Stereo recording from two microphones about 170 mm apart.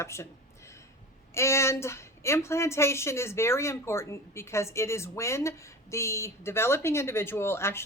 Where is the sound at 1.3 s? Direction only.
15° left (ahead or behind).